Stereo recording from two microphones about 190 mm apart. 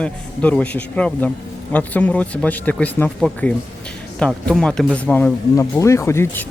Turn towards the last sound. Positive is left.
turn(degrees=15)  # may be behind; listen again after turning